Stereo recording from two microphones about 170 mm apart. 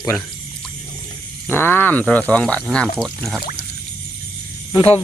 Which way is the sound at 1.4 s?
10° left (ahead or behind).